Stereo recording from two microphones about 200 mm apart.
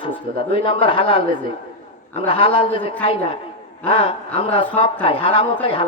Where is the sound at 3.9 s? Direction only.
30° left (ahead or behind).